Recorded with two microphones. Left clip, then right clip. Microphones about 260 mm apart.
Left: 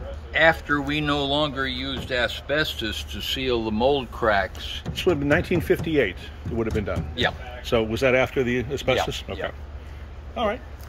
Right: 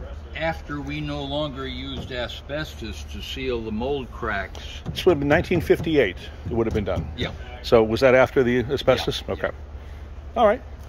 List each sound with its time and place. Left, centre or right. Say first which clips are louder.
0.3 s speech: left 9 dB; centre
4.9 s speech: right 3 dB; centre